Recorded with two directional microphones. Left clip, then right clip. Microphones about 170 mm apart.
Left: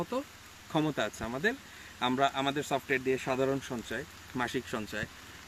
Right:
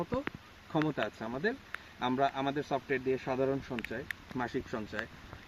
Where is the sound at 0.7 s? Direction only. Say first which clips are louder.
Left 2 dB; 15° left (ahead or behind).